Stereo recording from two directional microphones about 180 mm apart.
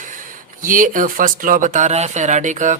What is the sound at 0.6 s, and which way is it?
Speech, 50° right (ahead or behind).